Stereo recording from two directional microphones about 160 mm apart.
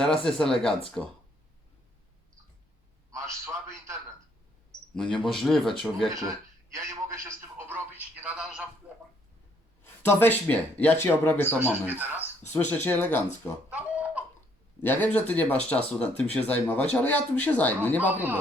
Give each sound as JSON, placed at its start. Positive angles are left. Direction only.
{"t": 0.3, "sound": "speech", "side_deg": 5}
{"t": 3.1, "sound": "a sound", "side_deg": -20}
{"t": 5.1, "sound": "speech", "side_deg": 0}
{"t": 6.1, "sound": "telephone", "side_deg": -20}
{"t": 8.9, "sound": "a sound", "side_deg": -5}
{"t": 9.8, "sound": "speech", "side_deg": 15}
{"t": 11.9, "sound": "speech", "side_deg": -10}
{"t": 12.5, "sound": "speech", "side_deg": 10}
{"t": 13.7, "sound": "chicken", "side_deg": -10}
{"t": 14.8, "sound": "speech", "side_deg": 10}